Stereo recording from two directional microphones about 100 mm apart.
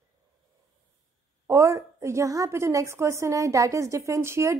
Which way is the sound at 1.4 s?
30° right (ahead or behind).